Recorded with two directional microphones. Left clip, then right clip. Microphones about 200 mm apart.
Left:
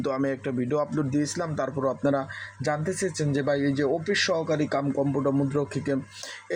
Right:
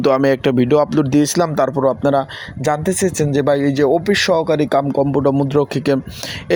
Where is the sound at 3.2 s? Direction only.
40° right (ahead or behind).